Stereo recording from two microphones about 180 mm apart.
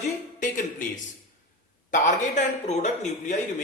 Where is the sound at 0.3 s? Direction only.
45° left (ahead or behind).